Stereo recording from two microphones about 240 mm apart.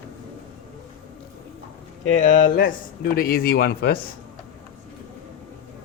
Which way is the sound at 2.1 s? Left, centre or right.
Left.